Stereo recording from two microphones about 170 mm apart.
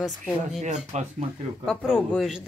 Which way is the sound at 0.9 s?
45° right (ahead or behind).